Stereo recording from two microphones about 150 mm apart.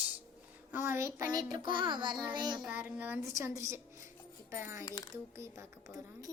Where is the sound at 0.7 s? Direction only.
15° right (ahead or behind).